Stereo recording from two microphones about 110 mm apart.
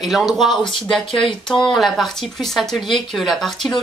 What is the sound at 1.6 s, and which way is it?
Speech, centre (ahead or behind).